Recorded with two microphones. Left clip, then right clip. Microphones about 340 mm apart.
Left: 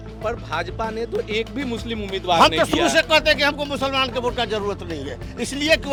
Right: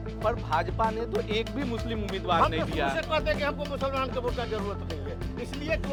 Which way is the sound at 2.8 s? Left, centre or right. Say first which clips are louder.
Left 11 dB; left.